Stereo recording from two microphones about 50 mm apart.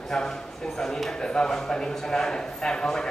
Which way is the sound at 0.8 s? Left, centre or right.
Centre.